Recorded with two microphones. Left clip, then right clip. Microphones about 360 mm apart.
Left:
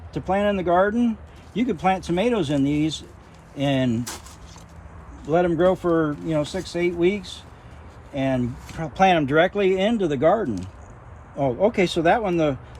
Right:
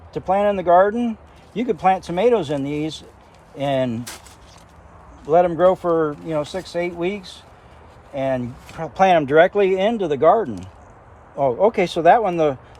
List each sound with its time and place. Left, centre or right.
0.1 s speech: centre
5.3 s speech: centre